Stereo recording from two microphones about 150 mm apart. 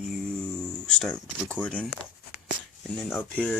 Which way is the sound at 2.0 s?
40° left (ahead or behind).